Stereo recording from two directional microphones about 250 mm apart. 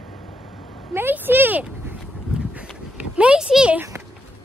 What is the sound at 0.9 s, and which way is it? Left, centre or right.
Speech, centre.